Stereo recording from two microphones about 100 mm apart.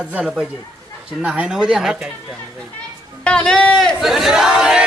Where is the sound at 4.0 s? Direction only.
5° right (ahead or behind).